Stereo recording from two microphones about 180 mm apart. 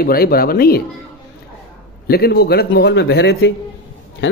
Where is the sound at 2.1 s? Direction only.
60° left (ahead or behind).